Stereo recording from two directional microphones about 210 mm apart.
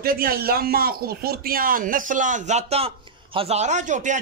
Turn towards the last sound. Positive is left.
turn(degrees=-35)  # may be behind; listen again after turning